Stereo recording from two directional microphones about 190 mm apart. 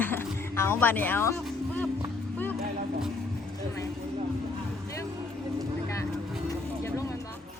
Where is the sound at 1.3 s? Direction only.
5° left (ahead or behind).